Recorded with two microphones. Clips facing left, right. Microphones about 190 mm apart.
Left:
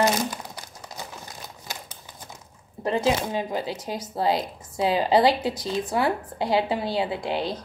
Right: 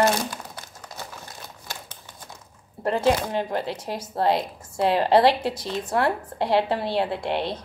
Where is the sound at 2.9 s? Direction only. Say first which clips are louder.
Right 2 dB; centre (ahead or behind).